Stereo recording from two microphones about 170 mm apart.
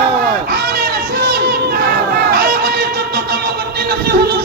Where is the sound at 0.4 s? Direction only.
70° right (ahead or behind).